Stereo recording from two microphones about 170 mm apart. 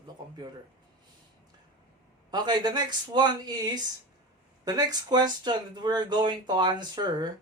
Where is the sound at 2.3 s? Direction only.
25° right (ahead or behind).